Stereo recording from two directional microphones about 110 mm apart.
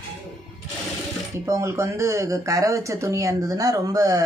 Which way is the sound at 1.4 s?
30° right (ahead or behind).